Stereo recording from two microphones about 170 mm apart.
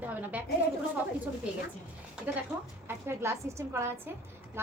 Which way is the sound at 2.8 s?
15° right (ahead or behind).